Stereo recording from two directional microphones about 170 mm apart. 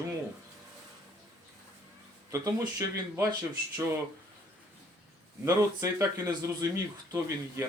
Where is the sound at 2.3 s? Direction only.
20° right (ahead or behind).